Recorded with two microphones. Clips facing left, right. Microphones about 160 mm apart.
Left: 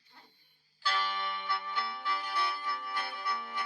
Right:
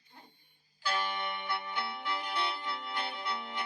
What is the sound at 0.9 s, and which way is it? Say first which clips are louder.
Music: even; 20° right (ahead or behind).